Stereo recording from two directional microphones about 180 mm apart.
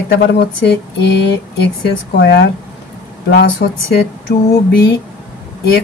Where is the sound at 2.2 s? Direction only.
65° left (ahead or behind).